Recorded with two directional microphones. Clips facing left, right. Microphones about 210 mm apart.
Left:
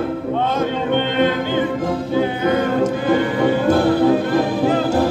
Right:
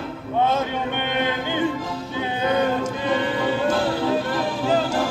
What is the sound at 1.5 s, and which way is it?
Music, 50° left (ahead or behind).